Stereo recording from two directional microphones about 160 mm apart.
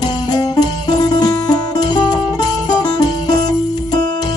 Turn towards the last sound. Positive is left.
turn(degrees=25)  # may be behind; listen again after turning